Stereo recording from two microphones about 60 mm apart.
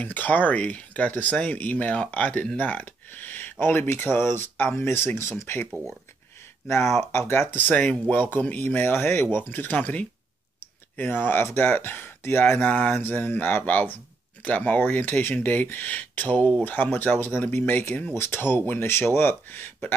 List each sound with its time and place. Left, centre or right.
0.0 s speech: left
5.7 s speech: centre
6.7 s speech: left
7.5 s speech: left
18.1 s speech: left